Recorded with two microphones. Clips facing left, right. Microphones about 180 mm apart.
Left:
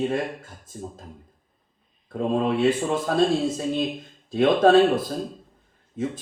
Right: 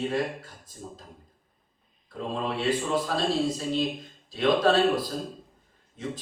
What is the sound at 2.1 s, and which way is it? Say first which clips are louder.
Speech: left 8 dB; 50° left (ahead or behind).